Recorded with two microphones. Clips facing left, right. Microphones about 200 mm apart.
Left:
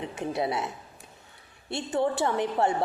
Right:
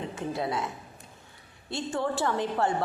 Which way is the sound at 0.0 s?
20° left (ahead or behind).